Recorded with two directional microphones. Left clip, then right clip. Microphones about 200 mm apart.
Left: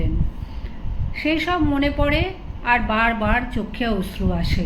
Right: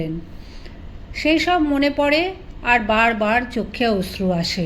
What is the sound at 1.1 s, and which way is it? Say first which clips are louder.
A woman's voice: right 4 dB; 45° right (ahead or behind).